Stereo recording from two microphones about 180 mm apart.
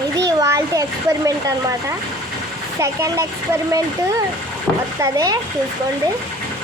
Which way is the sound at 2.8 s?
15° right (ahead or behind).